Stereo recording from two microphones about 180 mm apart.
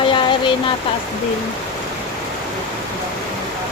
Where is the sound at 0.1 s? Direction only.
25° left (ahead or behind).